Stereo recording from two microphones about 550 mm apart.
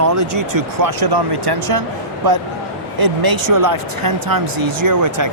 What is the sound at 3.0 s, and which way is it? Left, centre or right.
Speech, right.